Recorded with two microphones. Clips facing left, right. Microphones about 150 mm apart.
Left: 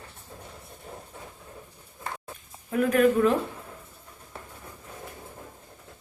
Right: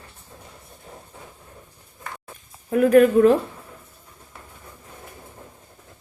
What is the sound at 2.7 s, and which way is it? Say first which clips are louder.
Speech: right 7 dB; 40° right (ahead or behind).